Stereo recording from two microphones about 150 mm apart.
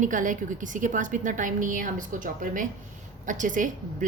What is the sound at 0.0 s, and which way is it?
A woman's voice, 60° right (ahead or behind).